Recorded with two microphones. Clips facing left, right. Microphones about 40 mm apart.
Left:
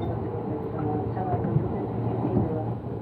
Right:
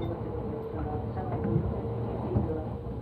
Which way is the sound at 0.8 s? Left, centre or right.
Centre.